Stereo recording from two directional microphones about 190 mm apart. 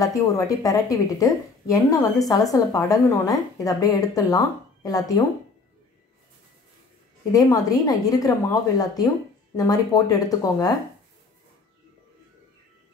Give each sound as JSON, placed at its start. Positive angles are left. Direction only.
{"t": 0.0, "sound": "a woman's voice", "side_deg": 20}
{"t": 7.3, "sound": "a woman's voice", "side_deg": 20}